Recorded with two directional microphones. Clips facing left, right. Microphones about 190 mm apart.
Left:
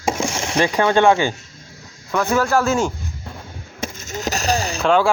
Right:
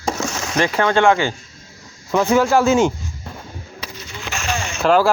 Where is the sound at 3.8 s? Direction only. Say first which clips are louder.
Left 8 dB; 45° left (ahead or behind).